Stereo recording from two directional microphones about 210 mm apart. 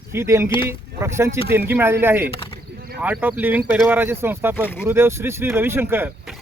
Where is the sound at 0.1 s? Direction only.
10° right (ahead or behind).